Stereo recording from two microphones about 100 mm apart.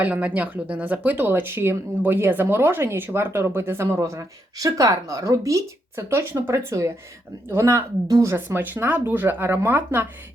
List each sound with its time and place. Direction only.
0.0 s speech: 15° right (ahead or behind)